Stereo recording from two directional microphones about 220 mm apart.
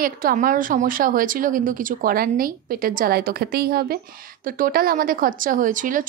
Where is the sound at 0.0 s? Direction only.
40° right (ahead or behind).